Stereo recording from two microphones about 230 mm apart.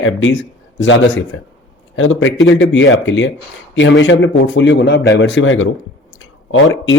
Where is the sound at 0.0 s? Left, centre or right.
Left.